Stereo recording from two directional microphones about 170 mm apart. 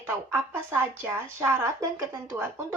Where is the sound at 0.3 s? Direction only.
15° right (ahead or behind).